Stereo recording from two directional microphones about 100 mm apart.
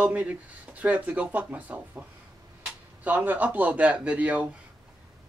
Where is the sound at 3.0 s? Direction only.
15° right (ahead or behind).